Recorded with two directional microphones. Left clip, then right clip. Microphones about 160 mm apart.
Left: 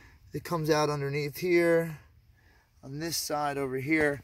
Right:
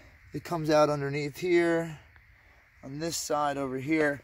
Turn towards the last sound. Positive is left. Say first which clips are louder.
# even
turn(degrees=-10)  # may be behind; listen again after turning